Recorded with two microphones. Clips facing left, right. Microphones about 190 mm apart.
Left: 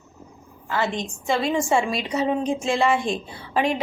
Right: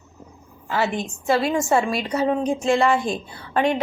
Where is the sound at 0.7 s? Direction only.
10° right (ahead or behind).